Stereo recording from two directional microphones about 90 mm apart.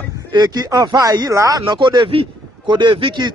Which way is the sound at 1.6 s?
60° right (ahead or behind).